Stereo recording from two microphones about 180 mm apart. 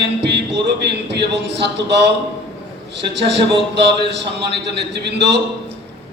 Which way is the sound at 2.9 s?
75° right (ahead or behind).